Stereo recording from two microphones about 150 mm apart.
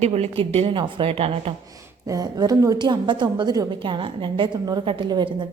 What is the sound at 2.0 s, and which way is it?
A woman's voice, 25° right (ahead or behind).